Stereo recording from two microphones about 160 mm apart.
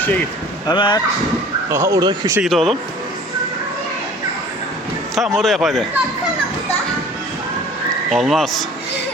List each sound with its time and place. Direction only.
0.7 s speech: 30° left (ahead or behind)
1.7 s speech: 20° right (ahead or behind)
2.4 s speech: centre (ahead or behind)
5.1 s speech: centre (ahead or behind)
8.1 s speech: centre (ahead or behind)